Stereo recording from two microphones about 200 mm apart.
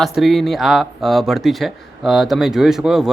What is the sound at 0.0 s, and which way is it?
Speech, centre (ahead or behind).